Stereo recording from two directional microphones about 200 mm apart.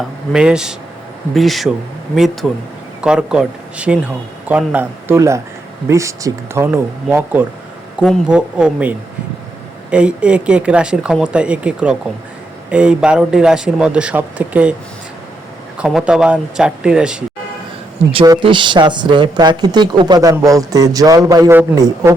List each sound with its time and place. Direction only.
0.3 s speech: 5° right (ahead or behind)
7.9 s speech: centre (ahead or behind)
15.8 s speech: 5° right (ahead or behind)
18.1 s speech: 25° right (ahead or behind)